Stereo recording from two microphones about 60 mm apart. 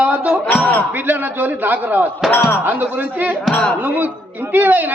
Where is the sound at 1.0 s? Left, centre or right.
Right.